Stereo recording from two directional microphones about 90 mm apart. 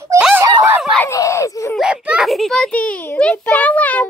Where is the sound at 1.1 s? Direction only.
35° left (ahead or behind).